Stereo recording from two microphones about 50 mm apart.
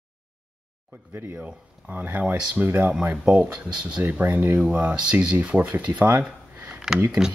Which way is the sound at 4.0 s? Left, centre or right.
Right.